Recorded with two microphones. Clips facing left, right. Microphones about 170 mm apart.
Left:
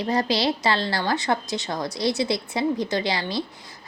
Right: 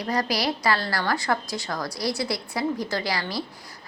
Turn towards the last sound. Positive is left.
turn(degrees=20)  # may be behind; listen again after turning